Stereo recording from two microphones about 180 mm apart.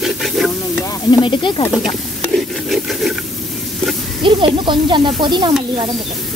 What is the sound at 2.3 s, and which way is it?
Rub, centre (ahead or behind).